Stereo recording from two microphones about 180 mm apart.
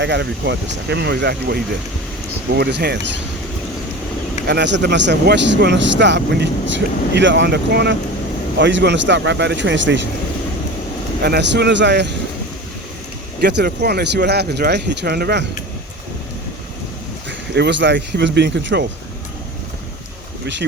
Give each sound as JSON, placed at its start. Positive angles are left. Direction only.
{"t": 0.0, "sound": "speech", "side_deg": -70}
{"t": 4.4, "sound": "speech", "side_deg": -75}
{"t": 11.2, "sound": "speech", "side_deg": -65}
{"t": 13.4, "sound": "speech", "side_deg": -65}
{"t": 17.2, "sound": "speech", "side_deg": -75}